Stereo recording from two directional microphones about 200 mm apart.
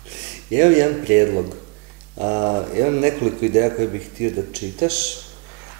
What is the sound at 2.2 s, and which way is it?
Speech, 30° right (ahead or behind).